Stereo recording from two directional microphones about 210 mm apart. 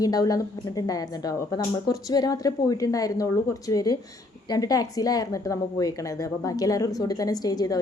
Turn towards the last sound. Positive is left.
turn(degrees=15)  # may be behind; listen again after turning